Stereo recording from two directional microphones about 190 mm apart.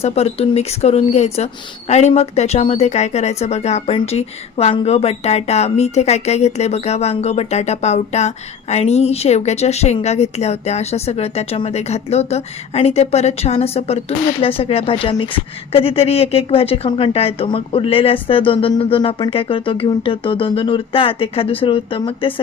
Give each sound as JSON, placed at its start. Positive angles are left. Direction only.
{"t": 0.0, "sound": "a woman's voice", "side_deg": 35}